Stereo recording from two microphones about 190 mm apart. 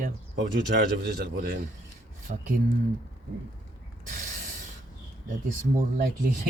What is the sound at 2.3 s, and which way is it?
Speech, 45° right (ahead or behind).